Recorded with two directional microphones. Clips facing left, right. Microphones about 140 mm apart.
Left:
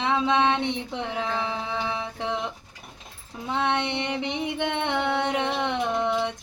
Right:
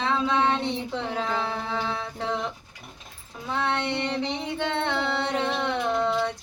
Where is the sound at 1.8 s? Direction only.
20° left (ahead or behind).